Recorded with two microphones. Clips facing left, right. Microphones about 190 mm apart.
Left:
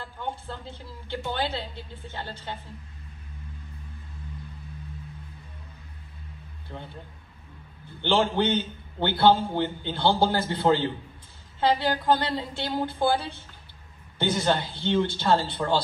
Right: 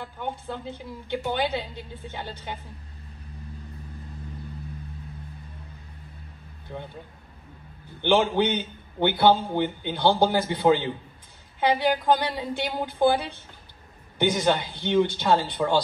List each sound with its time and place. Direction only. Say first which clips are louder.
0.0 s a man's voice: right 2 dB; 15° right (ahead or behind)
6.7 s a man's voice: right 3 dB; 15° right (ahead or behind)
8.0 s a man's voice: right 2 dB; 15° right (ahead or behind)